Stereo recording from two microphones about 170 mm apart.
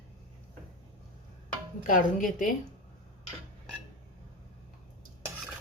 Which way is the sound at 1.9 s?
50° left (ahead or behind).